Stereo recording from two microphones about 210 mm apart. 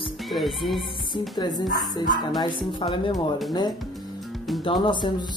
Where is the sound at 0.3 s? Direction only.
Centre (ahead or behind).